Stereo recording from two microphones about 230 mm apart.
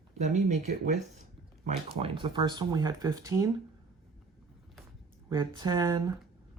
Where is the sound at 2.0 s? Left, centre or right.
Right.